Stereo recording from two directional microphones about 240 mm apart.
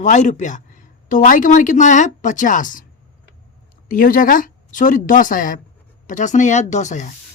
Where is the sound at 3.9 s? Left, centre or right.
Left.